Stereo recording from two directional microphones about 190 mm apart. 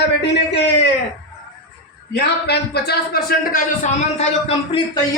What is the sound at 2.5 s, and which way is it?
A man's voice, 55° left (ahead or behind).